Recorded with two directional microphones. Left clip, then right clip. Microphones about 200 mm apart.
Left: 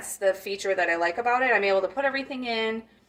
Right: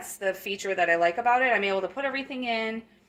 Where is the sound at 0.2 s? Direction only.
25° right (ahead or behind).